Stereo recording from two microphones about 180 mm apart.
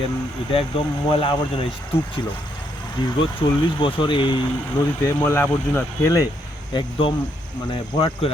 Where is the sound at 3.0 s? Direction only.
25° left (ahead or behind).